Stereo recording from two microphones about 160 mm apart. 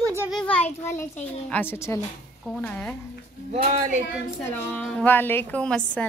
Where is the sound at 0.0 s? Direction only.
15° right (ahead or behind).